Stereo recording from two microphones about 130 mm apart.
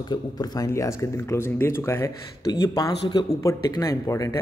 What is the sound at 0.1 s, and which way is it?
Speech, 30° left (ahead or behind).